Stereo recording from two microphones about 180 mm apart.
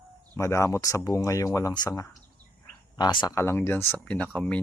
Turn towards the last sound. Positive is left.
turn(degrees=5)  # may be behind; listen again after turning